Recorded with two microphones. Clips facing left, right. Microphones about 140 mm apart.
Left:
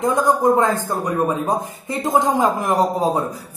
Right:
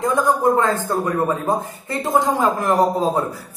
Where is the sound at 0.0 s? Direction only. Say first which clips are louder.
Left 1 dB; 15° left (ahead or behind).